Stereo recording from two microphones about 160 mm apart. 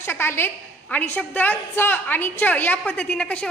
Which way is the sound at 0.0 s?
15° left (ahead or behind).